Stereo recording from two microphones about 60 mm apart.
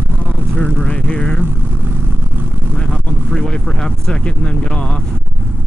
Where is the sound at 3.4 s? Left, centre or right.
Centre.